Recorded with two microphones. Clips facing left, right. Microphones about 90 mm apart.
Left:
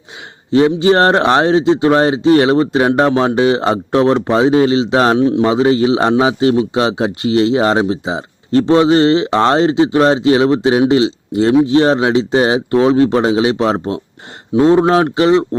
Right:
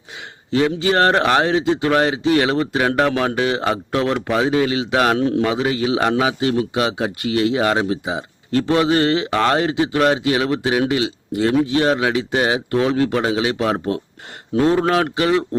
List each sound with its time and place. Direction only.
0.5 s a man's voice: 25° left (ahead or behind)